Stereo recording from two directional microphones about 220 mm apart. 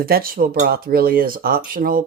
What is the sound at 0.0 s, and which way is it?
Speech, 40° right (ahead or behind).